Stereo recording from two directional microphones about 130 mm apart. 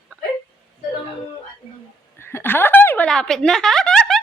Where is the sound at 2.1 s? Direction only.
20° left (ahead or behind).